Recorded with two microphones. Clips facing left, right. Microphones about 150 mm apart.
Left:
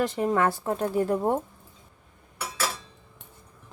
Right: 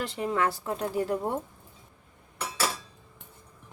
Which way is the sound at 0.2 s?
45° left (ahead or behind).